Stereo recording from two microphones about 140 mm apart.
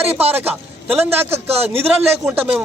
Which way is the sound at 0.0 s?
45° right (ahead or behind).